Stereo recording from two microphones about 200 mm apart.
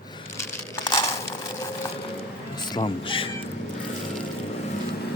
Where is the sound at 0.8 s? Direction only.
20° left (ahead or behind).